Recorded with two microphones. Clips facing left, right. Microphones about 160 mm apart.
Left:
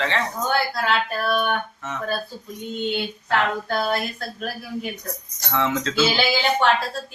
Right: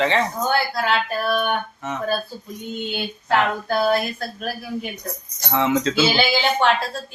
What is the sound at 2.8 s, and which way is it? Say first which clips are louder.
Speech: left 4 dB; 5° right (ahead or behind).